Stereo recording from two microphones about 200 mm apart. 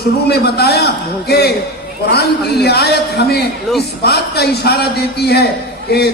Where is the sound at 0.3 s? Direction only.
55° left (ahead or behind).